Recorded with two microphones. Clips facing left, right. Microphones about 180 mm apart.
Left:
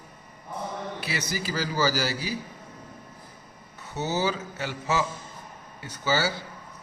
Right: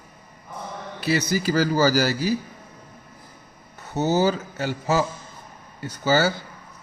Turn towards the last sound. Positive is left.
turn(degrees=-45)  # may be behind; listen again after turning